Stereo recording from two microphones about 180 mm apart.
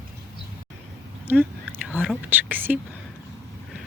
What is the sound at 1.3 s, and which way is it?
Chewing, 10° right (ahead or behind).